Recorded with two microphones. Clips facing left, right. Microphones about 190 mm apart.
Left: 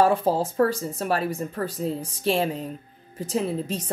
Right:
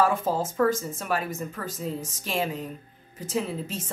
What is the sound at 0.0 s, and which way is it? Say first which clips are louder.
Speech: left 4 dB; 35° left (ahead or behind).